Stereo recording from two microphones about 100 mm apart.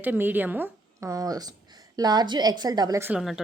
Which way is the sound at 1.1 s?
35° right (ahead or behind).